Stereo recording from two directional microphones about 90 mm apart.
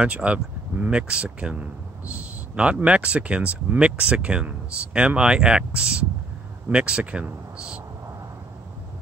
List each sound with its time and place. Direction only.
0.0 s speech: 10° right (ahead or behind)